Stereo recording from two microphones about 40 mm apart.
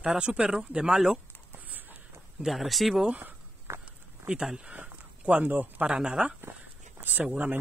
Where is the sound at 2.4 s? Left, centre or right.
Centre.